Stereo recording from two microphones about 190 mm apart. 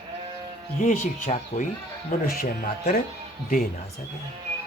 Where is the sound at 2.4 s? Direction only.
50° left (ahead or behind).